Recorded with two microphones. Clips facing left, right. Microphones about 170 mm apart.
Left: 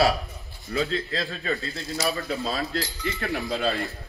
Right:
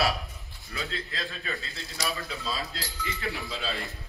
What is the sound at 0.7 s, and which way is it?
Speech, 40° left (ahead or behind).